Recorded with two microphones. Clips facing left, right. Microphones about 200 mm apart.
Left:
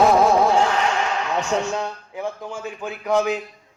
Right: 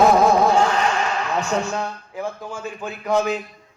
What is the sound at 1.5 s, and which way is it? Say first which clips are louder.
A man's voice: even; 20° left (ahead or behind).